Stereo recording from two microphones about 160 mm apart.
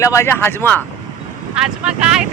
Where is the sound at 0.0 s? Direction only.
15° left (ahead or behind).